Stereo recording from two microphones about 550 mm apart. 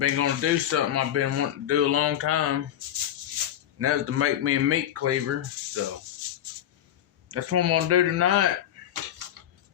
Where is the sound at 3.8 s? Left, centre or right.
Right.